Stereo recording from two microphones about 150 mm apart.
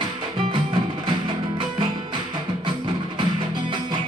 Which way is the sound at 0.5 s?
35° right (ahead or behind).